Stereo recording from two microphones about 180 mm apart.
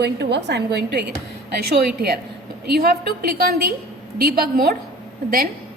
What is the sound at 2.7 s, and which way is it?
A woman's voice, 60° right (ahead or behind).